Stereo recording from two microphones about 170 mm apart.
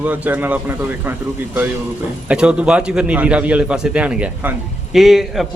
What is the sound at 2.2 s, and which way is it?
A man's voice, 5° right (ahead or behind).